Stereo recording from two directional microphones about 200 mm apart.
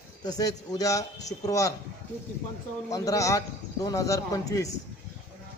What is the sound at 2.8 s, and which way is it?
A man's voice, 15° left (ahead or behind).